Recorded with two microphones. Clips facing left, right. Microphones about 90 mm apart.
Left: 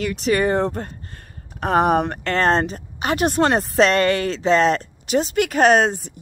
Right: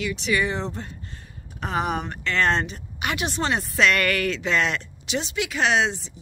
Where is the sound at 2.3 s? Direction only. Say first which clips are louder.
Left 4 dB; 40° left (ahead or behind).